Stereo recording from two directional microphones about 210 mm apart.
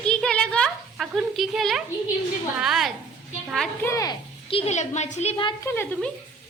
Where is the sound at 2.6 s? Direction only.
Centre (ahead or behind).